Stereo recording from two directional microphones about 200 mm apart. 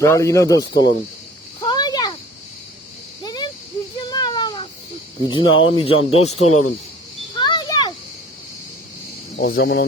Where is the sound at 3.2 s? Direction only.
20° left (ahead or behind).